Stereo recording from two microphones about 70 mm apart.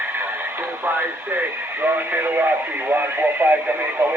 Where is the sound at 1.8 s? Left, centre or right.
Right.